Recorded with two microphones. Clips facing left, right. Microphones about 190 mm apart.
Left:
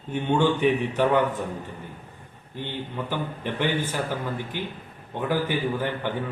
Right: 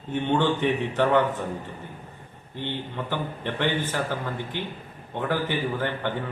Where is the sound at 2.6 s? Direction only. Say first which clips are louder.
Even; 10° left (ahead or behind).